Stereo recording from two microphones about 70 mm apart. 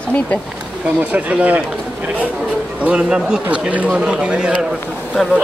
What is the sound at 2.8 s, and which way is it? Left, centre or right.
Speech, centre.